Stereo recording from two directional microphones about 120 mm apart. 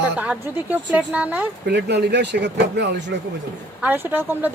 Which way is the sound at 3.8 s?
15° right (ahead or behind).